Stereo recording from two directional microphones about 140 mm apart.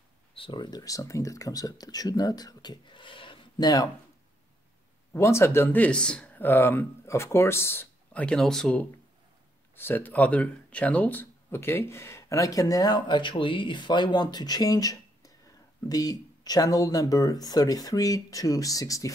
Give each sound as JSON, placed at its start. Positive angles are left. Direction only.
{"t": 0.3, "sound": "speech", "side_deg": 35}
{"t": 5.1, "sound": "speech", "side_deg": 20}
{"t": 9.8, "sound": "speech", "side_deg": 15}